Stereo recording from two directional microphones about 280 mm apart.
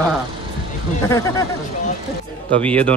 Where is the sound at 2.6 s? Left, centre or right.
Centre.